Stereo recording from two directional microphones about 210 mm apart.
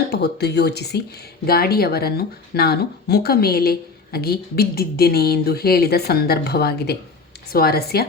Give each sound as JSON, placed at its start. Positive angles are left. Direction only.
{"t": 0.1, "sound": "speech", "side_deg": 50}